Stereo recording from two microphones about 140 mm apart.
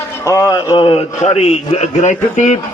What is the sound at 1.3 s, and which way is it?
A man's voice, 45° left (ahead or behind).